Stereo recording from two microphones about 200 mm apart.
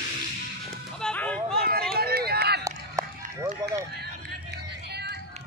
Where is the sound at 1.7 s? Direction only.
50° right (ahead or behind).